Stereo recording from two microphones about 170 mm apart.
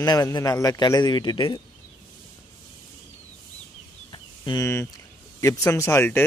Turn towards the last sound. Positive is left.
turn(degrees=15)  # may be behind; listen again after turning